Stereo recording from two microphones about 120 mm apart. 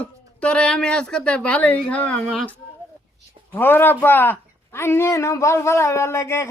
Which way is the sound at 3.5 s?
15° left (ahead or behind).